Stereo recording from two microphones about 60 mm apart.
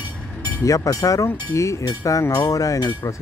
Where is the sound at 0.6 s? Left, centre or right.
Left.